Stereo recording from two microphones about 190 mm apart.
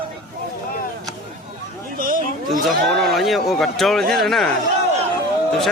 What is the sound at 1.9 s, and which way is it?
Speech, 50° right (ahead or behind).